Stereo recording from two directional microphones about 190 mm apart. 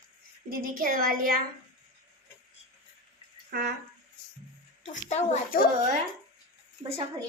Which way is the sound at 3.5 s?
55° right (ahead or behind).